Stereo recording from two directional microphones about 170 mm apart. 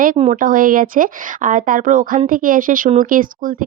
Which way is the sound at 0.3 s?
55° right (ahead or behind).